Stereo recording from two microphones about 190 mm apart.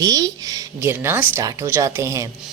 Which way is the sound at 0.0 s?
20° right (ahead or behind).